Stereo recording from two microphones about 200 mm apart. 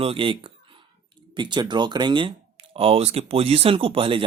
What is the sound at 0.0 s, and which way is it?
Speech, 25° right (ahead or behind).